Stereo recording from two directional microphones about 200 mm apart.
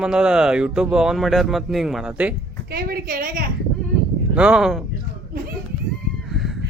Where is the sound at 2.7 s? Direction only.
45° right (ahead or behind).